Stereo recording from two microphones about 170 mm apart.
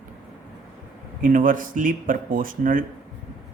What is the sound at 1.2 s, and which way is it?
Speech, 55° right (ahead or behind).